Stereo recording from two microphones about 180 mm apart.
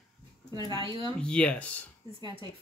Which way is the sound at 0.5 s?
25° right (ahead or behind).